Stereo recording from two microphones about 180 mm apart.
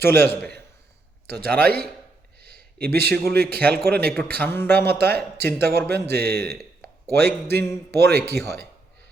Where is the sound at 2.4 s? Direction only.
60° right (ahead or behind).